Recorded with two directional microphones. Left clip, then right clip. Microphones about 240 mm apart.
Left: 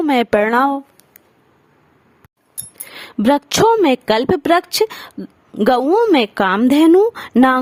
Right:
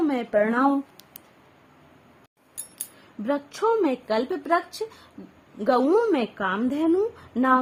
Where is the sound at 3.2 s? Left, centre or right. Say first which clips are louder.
Left 11 dB; left.